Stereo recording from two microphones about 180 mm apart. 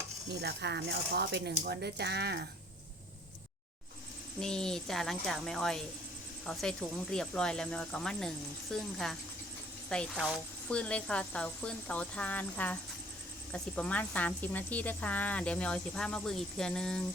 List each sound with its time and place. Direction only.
0.3 s speech: 70° right (ahead or behind)
4.4 s speech: 5° left (ahead or behind)